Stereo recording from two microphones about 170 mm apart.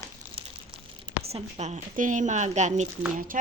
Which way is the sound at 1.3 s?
40° right (ahead or behind).